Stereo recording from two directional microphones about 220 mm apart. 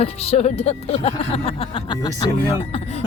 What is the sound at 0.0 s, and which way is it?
Speech, 30° left (ahead or behind).